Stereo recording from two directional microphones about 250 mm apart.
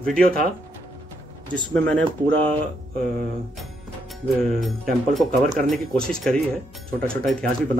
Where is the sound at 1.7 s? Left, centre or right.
Centre.